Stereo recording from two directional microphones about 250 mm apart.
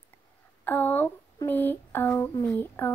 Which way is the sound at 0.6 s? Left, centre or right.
Centre.